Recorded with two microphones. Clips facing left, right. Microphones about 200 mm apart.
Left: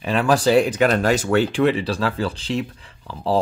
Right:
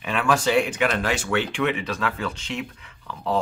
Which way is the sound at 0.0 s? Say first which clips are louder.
Left 4 dB; 35° left (ahead or behind).